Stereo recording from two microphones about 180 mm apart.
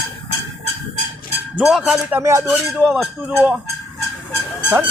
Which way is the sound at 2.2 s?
15° right (ahead or behind).